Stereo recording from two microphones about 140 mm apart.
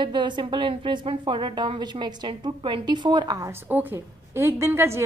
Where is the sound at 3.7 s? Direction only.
15° right (ahead or behind).